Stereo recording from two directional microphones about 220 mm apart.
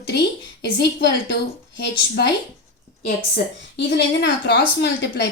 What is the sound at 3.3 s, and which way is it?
A woman's voice, 50° left (ahead or behind).